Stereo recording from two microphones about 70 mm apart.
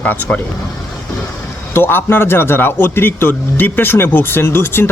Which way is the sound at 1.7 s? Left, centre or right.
Left.